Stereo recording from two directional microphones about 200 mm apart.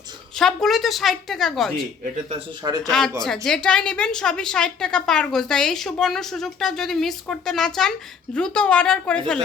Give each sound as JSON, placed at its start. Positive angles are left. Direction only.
{"t": 0.3, "sound": "a woman's voice", "side_deg": 0}
{"t": 2.6, "sound": "speech", "side_deg": -20}
{"t": 3.2, "sound": "a woman's voice", "side_deg": 0}